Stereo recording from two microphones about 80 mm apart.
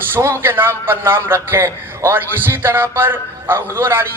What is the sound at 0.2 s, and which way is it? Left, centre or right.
A man's voice, right.